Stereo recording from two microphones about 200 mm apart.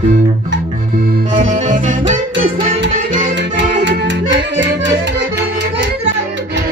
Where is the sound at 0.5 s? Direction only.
45° right (ahead or behind).